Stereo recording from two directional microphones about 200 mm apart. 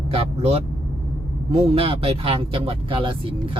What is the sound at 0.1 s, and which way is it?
A man's voice, 30° right (ahead or behind).